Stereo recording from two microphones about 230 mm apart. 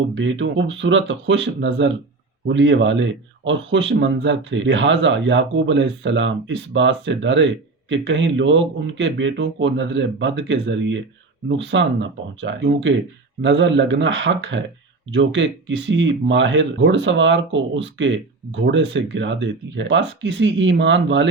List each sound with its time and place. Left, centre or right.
0.1 s speech: right